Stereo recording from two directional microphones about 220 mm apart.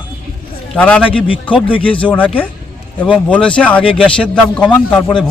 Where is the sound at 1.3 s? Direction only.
20° left (ahead or behind).